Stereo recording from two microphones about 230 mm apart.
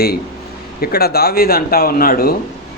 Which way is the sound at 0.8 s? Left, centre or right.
Left.